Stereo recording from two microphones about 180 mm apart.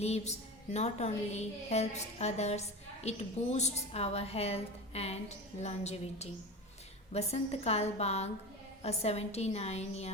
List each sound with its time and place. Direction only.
0.0 s music: 35° left (ahead or behind)